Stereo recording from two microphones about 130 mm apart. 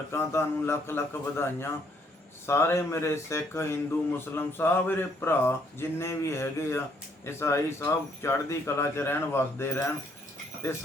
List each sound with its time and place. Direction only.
0.1 s speech: 15° left (ahead or behind)